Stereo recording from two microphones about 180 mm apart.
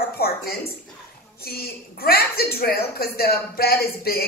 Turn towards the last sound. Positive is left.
turn(degrees=60)  # may be behind; listen again after turning